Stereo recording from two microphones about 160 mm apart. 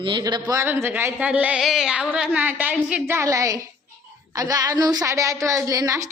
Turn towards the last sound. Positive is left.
turn(degrees=-20)  # may be behind; listen again after turning